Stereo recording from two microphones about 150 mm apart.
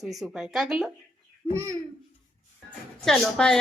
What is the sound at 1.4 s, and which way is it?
Speech, 15° right (ahead or behind).